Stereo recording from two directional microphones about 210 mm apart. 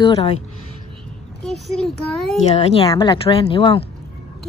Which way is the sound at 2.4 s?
30° left (ahead or behind).